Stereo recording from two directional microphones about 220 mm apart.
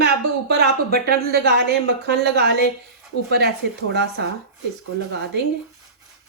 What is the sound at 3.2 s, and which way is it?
Speech, 45° right (ahead or behind).